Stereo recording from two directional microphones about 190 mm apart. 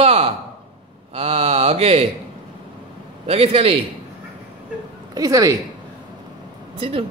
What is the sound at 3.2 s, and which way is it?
Speech, 30° right (ahead or behind).